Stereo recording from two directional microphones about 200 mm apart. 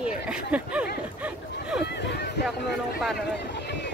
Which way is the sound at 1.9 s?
60° left (ahead or behind).